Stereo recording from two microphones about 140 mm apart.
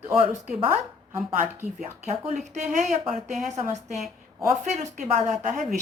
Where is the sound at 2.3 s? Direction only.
55° right (ahead or behind).